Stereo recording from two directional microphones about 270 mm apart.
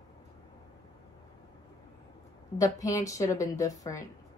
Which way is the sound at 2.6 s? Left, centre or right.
Centre.